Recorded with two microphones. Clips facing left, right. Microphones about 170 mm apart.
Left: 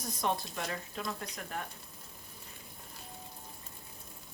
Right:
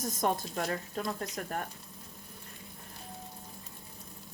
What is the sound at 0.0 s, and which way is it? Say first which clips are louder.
Speech: right 3 dB; 45° right (ahead or behind).